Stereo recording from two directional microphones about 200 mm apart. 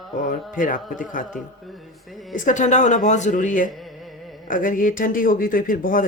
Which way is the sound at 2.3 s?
40° left (ahead or behind).